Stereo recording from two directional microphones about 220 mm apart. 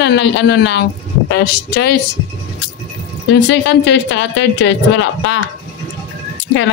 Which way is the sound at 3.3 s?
55° left (ahead or behind).